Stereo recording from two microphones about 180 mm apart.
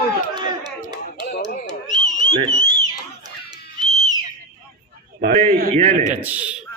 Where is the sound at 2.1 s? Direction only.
30° right (ahead or behind).